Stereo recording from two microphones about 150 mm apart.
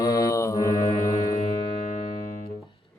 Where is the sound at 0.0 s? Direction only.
25° left (ahead or behind).